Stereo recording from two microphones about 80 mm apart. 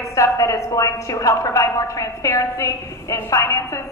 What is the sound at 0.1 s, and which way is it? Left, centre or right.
Speech, left.